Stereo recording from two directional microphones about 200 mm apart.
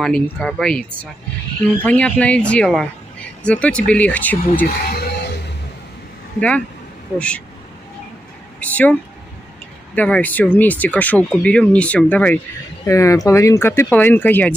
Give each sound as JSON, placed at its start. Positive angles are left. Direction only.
{"t": 0.0, "sound": "speech", "side_deg": 5}
{"t": 4.8, "sound": "music", "side_deg": 50}
{"t": 7.2, "sound": "speech", "side_deg": 5}
{"t": 8.5, "sound": "a sound", "side_deg": 10}
{"t": 9.9, "sound": "speech", "side_deg": 5}